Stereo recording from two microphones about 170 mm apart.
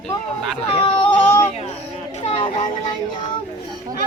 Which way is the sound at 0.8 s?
30° left (ahead or behind).